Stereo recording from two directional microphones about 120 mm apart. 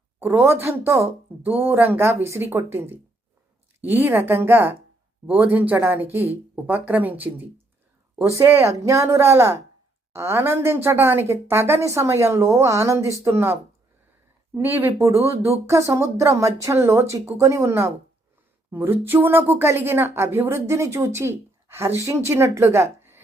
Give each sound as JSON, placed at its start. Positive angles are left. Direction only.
{"t": 0.2, "sound": "speech", "side_deg": -20}